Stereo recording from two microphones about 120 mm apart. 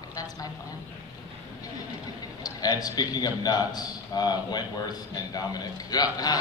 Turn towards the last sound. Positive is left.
turn(degrees=35)  # may be behind; listen again after turning